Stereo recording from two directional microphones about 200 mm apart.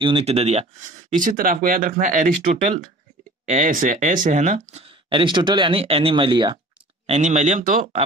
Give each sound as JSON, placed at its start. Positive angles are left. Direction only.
{"t": 0.0, "sound": "speech", "side_deg": -30}
{"t": 7.1, "sound": "speech", "side_deg": -35}